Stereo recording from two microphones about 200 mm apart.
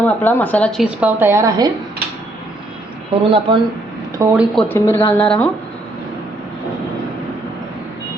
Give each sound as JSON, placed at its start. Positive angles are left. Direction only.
{"t": 0.0, "sound": "a woman's voice", "side_deg": 10}
{"t": 3.2, "sound": "speech", "side_deg": -25}
{"t": 4.2, "sound": "speech", "side_deg": -10}
{"t": 4.5, "sound": "speech", "side_deg": 10}